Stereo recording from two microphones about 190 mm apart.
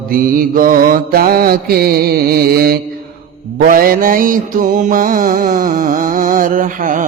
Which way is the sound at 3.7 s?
45° right (ahead or behind).